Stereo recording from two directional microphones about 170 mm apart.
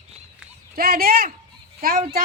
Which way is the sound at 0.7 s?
60° right (ahead or behind).